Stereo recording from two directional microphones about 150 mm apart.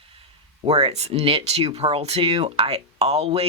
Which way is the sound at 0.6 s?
40° right (ahead or behind).